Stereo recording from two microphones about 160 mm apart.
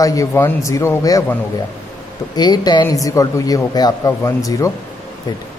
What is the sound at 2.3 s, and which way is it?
A man's voice, 25° left (ahead or behind).